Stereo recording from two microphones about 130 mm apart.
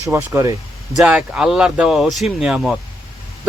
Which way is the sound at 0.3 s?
25° right (ahead or behind).